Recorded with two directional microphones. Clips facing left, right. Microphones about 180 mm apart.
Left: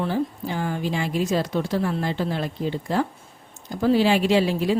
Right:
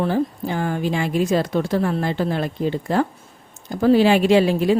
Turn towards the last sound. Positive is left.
turn(degrees=-55)  # may be behind; listen again after turning